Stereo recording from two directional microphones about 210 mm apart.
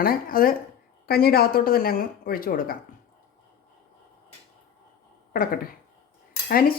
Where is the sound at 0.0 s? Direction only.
45° left (ahead or behind).